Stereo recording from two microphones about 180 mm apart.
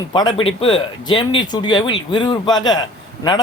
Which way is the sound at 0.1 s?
25° left (ahead or behind).